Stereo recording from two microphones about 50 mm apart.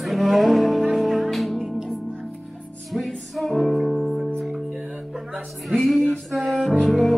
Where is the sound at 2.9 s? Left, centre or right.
Centre.